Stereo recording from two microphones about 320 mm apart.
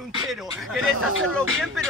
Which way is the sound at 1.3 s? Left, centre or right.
Centre.